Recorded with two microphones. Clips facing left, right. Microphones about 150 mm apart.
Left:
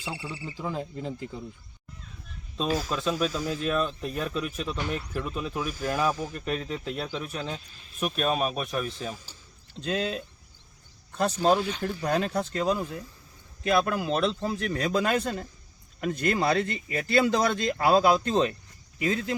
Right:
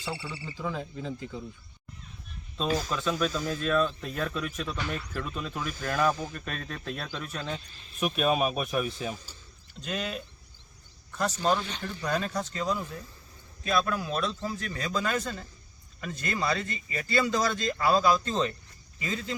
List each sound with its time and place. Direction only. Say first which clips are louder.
0.0 s speech: left 1 dB; 10° left (ahead or behind)
0.6 s speech: left 1 dB; 25° left (ahead or behind)
2.6 s speech: left 1 dB; 5° left (ahead or behind)
7.9 s speech: right 1 dB; centre (ahead or behind)
9.8 s speech: left 6 dB; 25° left (ahead or behind)
11.5 s speech: left 4 dB; 10° left (ahead or behind)
12.0 s speech: left 3 dB; 60° left (ahead or behind)